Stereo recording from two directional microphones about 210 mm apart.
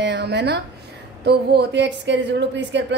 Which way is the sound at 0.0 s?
55° right (ahead or behind).